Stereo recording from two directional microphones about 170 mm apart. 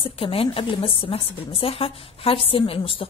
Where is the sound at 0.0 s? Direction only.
35° left (ahead or behind).